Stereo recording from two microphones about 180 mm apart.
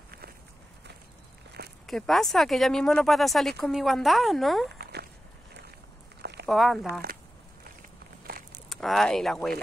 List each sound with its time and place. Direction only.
1.9 s speech: centre (ahead or behind)
6.4 s speech: centre (ahead or behind)
6.9 s speech: 60° right (ahead or behind)
8.6 s speech: centre (ahead or behind)